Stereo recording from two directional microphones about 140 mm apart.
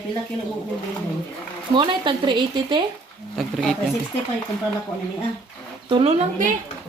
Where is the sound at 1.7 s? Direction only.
35° right (ahead or behind).